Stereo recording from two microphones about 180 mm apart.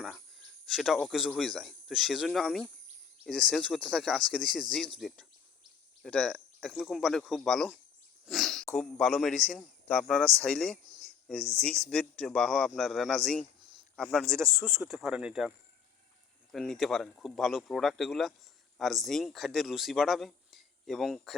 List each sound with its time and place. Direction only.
0.0 s a man's voice: centre (ahead or behind)
10.9 s a sound: centre (ahead or behind)
11.6 s a man's voice: 5° left (ahead or behind)
14.3 s speech: 15° right (ahead or behind)
14.8 s a man's voice: 5° right (ahead or behind)